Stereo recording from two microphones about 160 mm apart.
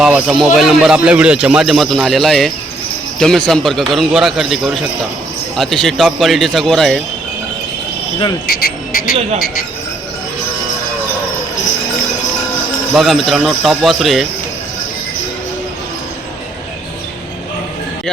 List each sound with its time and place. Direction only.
0.0 s a man's voice: 5° right (ahead or behind)
8.4 s frog: 70° left (ahead or behind)
12.9 s a man's voice: centre (ahead or behind)